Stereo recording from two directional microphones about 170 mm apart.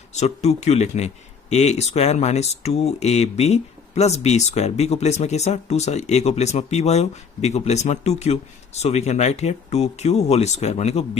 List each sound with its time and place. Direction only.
0.1 s speech: 40° left (ahead or behind)